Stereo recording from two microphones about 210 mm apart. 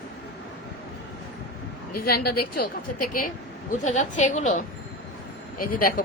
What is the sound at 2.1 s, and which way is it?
A woman's voice, 45° left (ahead or behind).